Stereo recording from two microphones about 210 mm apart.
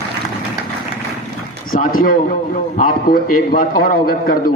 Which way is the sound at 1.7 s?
40° left (ahead or behind).